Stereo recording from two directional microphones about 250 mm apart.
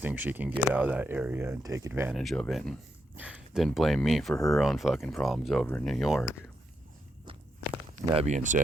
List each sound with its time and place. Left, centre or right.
0.0 s speech: centre
8.0 s speech: right